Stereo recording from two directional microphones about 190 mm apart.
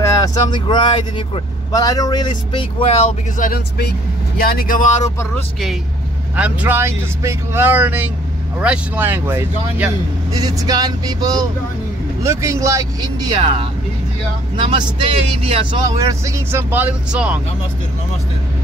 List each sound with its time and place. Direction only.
0.0 s speech: 20° left (ahead or behind)
3.3 s speech: 50° left (ahead or behind)
5.3 s speech: centre (ahead or behind); by 13.6 s 25° right (ahead or behind)
15.4 s speech: 30° right (ahead or behind)
16.0 s speech: 15° right (ahead or behind)